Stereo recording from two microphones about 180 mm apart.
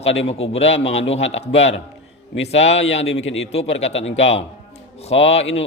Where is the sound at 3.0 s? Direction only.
90° left.